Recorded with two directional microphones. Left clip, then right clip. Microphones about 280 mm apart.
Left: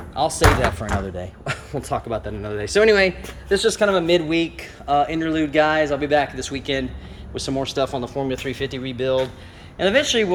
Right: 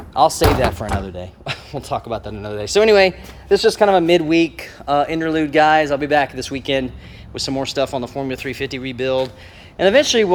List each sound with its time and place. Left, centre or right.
0.1 s speech: centre